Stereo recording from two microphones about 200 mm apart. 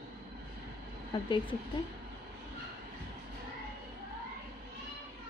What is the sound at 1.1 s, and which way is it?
Speech, 25° left (ahead or behind).